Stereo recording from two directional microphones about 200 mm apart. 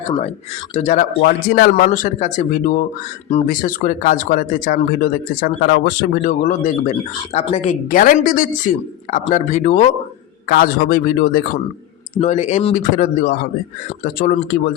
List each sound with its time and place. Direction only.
0.7 s speech: 35° left (ahead or behind)
12.2 s speech: 35° left (ahead or behind)